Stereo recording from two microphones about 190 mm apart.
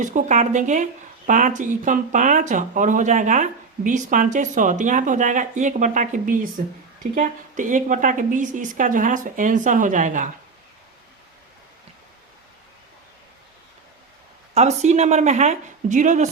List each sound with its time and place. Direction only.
0.0 s a woman's voice: 40° right (ahead or behind)
14.5 s speech: 35° right (ahead or behind)